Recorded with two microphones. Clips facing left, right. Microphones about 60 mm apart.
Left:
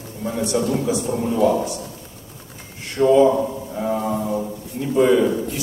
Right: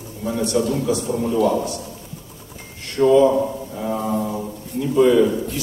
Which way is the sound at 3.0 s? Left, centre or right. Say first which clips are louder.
Even; centre.